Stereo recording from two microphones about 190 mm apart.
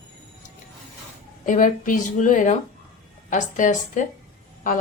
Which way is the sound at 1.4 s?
45° left (ahead or behind).